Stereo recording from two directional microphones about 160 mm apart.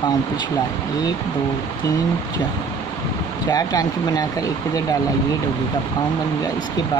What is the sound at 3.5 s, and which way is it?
Speech, 25° left (ahead or behind).